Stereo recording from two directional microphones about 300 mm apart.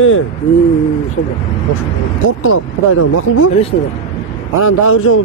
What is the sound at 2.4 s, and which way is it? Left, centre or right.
Speech, left.